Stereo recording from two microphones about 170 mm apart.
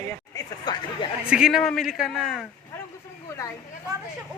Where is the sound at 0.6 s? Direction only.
25° left (ahead or behind).